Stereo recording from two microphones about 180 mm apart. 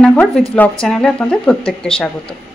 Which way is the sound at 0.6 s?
5° left (ahead or behind).